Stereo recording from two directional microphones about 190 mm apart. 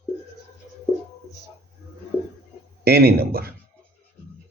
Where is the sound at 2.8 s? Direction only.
55° right (ahead or behind).